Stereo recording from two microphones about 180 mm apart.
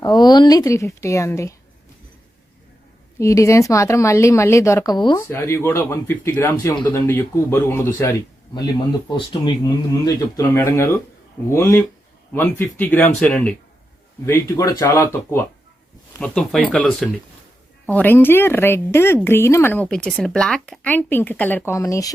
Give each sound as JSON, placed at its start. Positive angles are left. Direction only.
{"t": 0.0, "sound": "speech", "side_deg": 20}
{"t": 3.2, "sound": "speech", "side_deg": 15}